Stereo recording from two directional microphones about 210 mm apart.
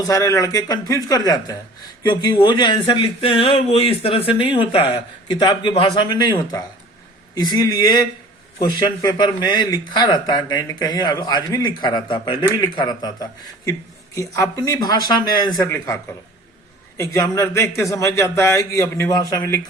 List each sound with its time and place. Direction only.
0.1 s a man's voice: 15° left (ahead or behind)
17.0 s a man's voice: 15° left (ahead or behind)